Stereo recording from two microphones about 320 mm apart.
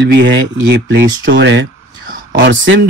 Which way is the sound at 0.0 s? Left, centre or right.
Right.